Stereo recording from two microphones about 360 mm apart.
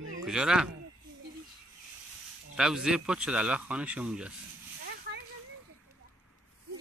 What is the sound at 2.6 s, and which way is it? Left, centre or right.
Speech, centre.